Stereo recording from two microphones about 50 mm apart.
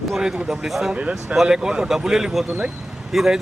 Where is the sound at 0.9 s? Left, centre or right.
Right.